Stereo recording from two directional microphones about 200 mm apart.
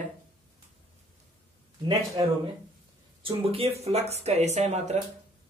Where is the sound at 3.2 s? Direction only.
30° right (ahead or behind).